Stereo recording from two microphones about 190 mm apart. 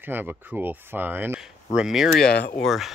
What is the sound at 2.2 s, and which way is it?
Speech, 55° left (ahead or behind).